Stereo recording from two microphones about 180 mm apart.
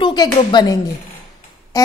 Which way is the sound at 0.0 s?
25° left (ahead or behind).